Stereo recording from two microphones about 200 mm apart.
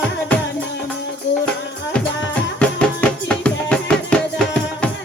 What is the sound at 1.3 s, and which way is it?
Music, 65° left (ahead or behind).